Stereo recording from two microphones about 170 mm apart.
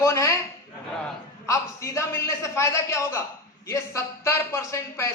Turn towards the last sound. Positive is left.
turn(degrees=15)  # may be behind; listen again after turning